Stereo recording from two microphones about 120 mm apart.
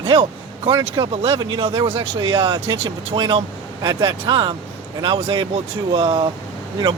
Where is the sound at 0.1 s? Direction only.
45° right (ahead or behind).